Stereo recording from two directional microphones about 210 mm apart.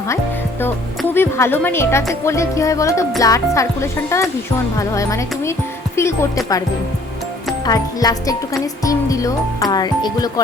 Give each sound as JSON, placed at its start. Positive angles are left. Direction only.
{"t": 0.6, "sound": "a woman's voice", "side_deg": 10}
{"t": 7.6, "sound": "speech", "side_deg": 20}